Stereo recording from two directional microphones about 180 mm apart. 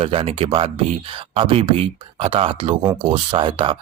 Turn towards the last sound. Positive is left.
turn(degrees=-30)  # may be behind; listen again after turning